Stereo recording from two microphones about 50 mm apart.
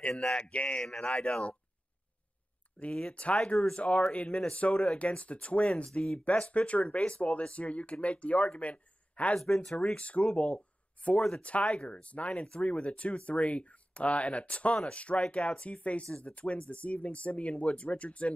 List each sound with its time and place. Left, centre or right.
0.1 s speech: centre
0.4 s speech: left
0.8 s speech: centre
3.0 s speech: left
8.5 s a sound: left
9.5 s speech: centre
9.9 s speech: left